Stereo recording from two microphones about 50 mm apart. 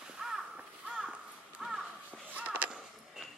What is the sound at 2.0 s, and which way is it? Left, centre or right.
Crow, right.